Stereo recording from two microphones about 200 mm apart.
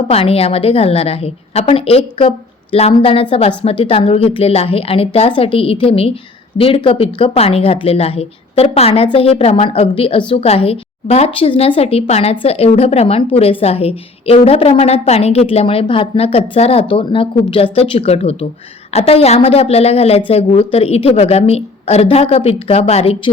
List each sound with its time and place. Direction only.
0.1 s a woman's voice: 30° left (ahead or behind)